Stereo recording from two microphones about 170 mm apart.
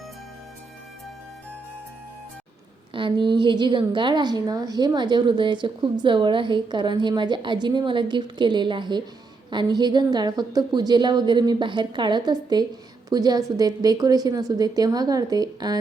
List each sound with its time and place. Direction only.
2.9 s a woman's voice: 30° right (ahead or behind)